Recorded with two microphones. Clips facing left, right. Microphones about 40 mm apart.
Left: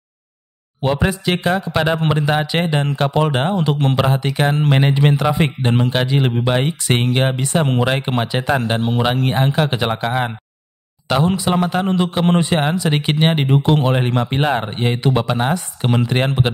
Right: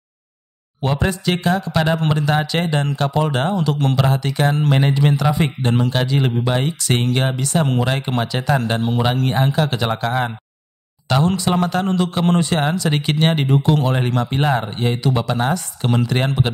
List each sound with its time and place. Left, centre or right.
0.8 s a man's voice: centre